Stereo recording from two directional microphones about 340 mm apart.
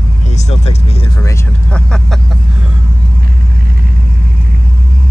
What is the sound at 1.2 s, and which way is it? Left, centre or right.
Vehicle, centre.